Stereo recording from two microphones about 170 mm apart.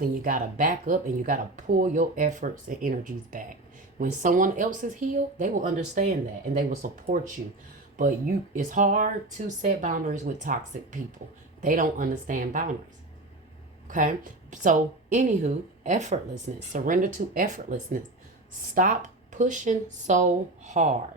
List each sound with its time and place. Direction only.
0.0 s speech: 50° right (ahead or behind)
13.8 s speech: 50° right (ahead or behind)